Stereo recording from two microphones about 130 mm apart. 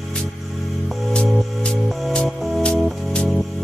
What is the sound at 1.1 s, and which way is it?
Music, 5° left (ahead or behind).